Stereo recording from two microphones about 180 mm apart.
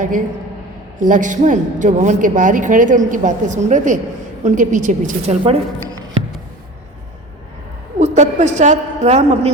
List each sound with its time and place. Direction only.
0.9 s a woman's voice: 45° right (ahead or behind)
7.9 s a woman's voice: 40° right (ahead or behind)